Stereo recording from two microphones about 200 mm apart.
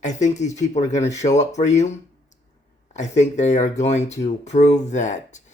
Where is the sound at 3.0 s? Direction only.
35° left (ahead or behind).